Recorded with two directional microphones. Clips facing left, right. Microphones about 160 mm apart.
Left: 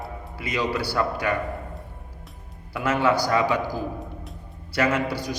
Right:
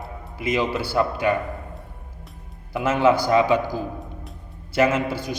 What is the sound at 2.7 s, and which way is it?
A man's voice, 25° right (ahead or behind).